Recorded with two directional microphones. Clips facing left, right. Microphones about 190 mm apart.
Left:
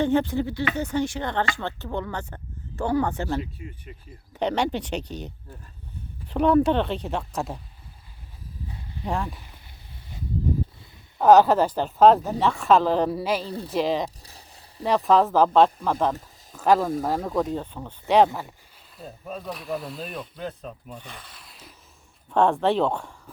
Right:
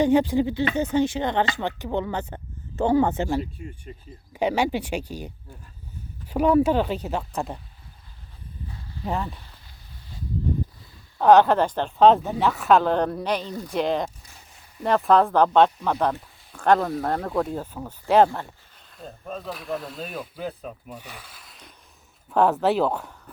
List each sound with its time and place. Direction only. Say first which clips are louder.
0.0 s speech: right 3 dB; 15° right (ahead or behind)
3.9 s speech: right 3 dB; 35° right (ahead or behind)
4.3 s speech: right 2 dB; 10° right (ahead or behind)
9.0 s speech: even; centre (ahead or behind)
11.2 s speech: even; 5° left (ahead or behind)
13.4 s speech: left 1 dB; 30° left (ahead or behind)
13.7 s speech: even; centre (ahead or behind)
14.2 s a sound: left 3 dB; 35° left (ahead or behind)
14.8 s speech: right 1 dB; centre (ahead or behind)
18.9 s speech: right 1 dB; 5° left (ahead or behind)